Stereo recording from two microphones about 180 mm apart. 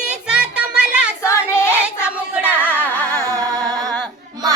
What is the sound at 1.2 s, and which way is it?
Child singing, 15° left (ahead or behind).